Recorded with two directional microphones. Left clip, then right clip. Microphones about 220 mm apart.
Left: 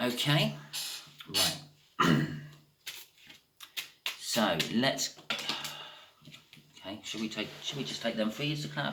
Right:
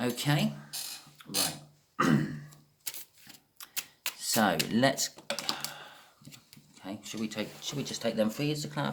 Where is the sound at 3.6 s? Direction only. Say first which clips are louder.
Left 1 dB; 50° right (ahead or behind).